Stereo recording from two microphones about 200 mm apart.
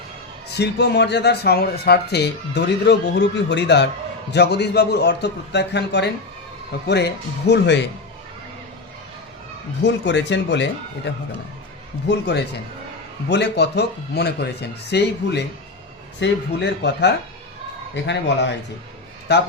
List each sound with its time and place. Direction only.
0.5 s speech: 55° left (ahead or behind)
9.8 s speech: 60° left (ahead or behind)